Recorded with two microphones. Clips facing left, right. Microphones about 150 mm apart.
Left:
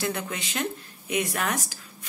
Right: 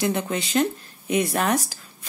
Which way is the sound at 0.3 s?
35° right (ahead or behind).